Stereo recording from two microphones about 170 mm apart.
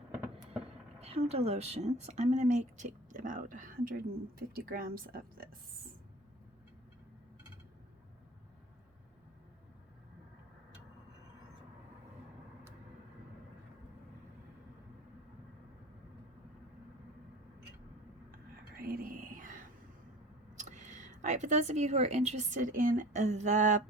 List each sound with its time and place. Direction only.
1.0 s speech: 35° right (ahead or behind); by 5.5 s 60° right (ahead or behind)
18.8 s whispering: 55° right (ahead or behind)
20.6 s speech: 45° right (ahead or behind)